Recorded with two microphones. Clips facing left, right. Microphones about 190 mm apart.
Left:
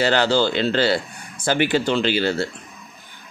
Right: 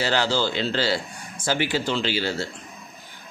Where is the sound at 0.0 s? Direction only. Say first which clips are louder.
Left 5 dB; 60° left (ahead or behind).